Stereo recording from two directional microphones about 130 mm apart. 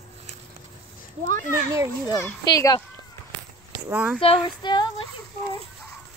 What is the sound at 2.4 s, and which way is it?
Speech, 30° left (ahead or behind).